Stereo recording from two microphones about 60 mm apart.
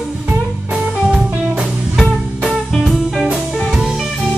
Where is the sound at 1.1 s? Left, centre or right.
Centre.